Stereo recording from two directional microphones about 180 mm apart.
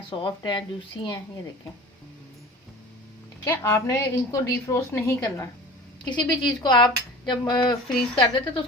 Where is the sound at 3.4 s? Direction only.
15° left (ahead or behind).